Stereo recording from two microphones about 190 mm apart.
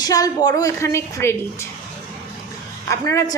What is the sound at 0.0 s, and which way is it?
A woman's voice, 20° left (ahead or behind).